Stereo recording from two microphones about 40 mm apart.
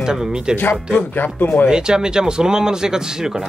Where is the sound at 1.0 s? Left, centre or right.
Left.